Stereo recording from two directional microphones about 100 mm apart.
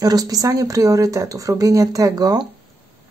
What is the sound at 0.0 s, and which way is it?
Speech, 40° right (ahead or behind).